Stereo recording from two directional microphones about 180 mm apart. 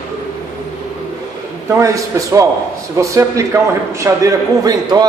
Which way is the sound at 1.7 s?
15° right (ahead or behind).